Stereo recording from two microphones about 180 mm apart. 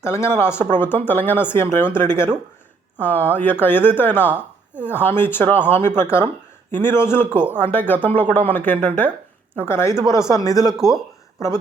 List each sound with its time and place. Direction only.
0.0 s speech: 15° left (ahead or behind)
10.8 s speech: centre (ahead or behind)
11.3 s speech: 15° left (ahead or behind)